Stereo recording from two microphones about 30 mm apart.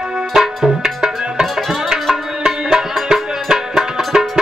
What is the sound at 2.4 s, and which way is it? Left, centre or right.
Music, right.